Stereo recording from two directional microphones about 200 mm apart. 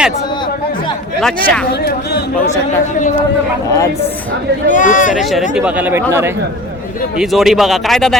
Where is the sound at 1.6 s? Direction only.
50° left (ahead or behind).